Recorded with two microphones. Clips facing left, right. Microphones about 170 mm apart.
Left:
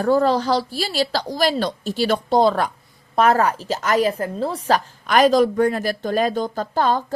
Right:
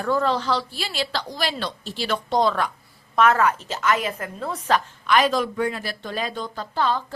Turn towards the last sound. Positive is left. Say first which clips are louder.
# left 4 dB
turn(degrees=45)  # may be behind; listen again after turning